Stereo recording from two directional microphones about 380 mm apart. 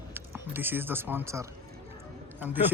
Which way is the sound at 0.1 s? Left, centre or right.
Centre.